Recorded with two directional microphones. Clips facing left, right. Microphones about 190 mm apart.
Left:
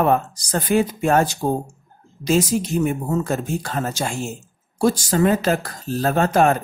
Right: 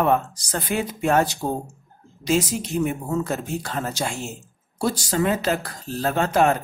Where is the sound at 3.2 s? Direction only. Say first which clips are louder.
Left 3 dB; 45° left (ahead or behind).